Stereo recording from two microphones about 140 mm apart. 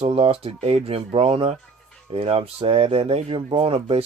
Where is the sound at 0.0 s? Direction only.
40° right (ahead or behind).